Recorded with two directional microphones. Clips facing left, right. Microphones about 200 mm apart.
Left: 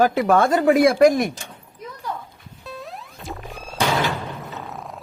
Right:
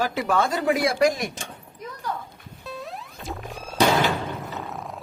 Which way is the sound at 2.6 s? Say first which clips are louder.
Even; centre (ahead or behind).